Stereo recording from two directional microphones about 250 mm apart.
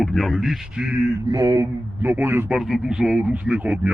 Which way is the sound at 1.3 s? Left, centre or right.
Centre.